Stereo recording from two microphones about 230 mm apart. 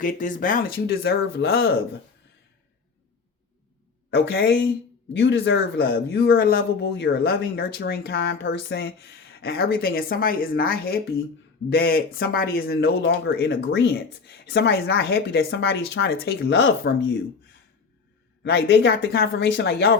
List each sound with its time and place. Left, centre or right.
0.0 s speech: left
5.1 s speech: left
18.4 s speech: left